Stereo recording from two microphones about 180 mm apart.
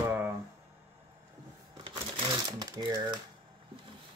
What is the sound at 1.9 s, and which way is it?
Sewing machine, 30° right (ahead or behind).